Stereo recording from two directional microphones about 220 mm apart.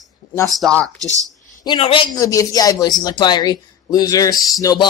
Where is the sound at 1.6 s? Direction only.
25° left (ahead or behind).